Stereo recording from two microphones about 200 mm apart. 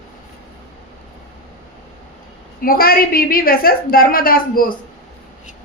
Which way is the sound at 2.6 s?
45° left (ahead or behind).